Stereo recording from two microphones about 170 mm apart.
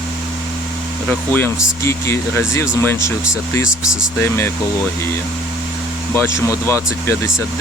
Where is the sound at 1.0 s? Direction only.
10° left (ahead or behind).